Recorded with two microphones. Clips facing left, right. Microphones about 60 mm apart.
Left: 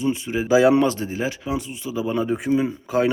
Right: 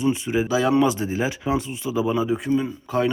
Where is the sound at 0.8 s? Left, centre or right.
Centre.